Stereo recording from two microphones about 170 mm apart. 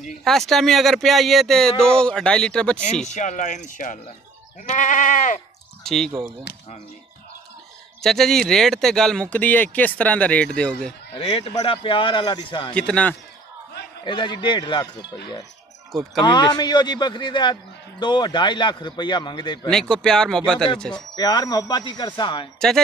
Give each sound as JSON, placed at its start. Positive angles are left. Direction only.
{"t": 0.2, "sound": "speech", "side_deg": 0}
{"t": 3.1, "sound": "speech", "side_deg": 45}
{"t": 5.9, "sound": "speech", "side_deg": 5}
{"t": 8.0, "sound": "speech", "side_deg": 0}
{"t": 11.1, "sound": "a man's voice", "side_deg": 35}
{"t": 12.7, "sound": "speech", "side_deg": 5}
{"t": 14.0, "sound": "a man's voice", "side_deg": 25}
{"t": 16.2, "sound": "a man's voice", "side_deg": 25}
{"t": 19.7, "sound": "speech", "side_deg": 5}
{"t": 21.2, "sound": "a man's voice", "side_deg": 25}